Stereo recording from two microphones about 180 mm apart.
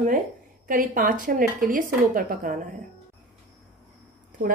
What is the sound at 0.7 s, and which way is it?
A woman's voice, 50° right (ahead or behind).